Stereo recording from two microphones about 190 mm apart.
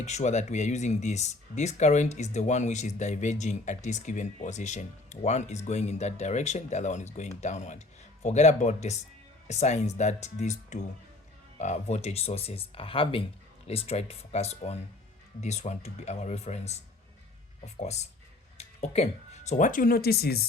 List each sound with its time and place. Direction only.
0.0 s speech: 35° left (ahead or behind)
17.7 s speech: 35° left (ahead or behind); by 20.4 s 55° left (ahead or behind)